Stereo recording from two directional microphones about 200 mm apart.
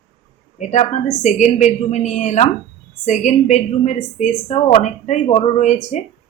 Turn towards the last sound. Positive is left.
turn(degrees=35)  # may be behind; listen again after turning